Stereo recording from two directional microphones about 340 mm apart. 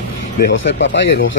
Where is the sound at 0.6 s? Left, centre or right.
Left.